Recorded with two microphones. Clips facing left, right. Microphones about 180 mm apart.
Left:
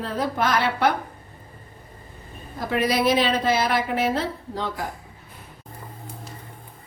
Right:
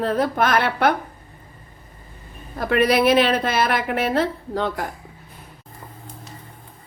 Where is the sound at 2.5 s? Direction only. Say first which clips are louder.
Right 5 dB; 65° right (ahead or behind).